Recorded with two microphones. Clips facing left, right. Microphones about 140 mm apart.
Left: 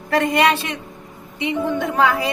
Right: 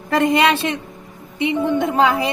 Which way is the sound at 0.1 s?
25° right (ahead or behind).